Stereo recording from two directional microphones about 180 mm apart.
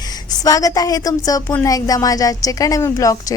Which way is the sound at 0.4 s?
20° left (ahead or behind).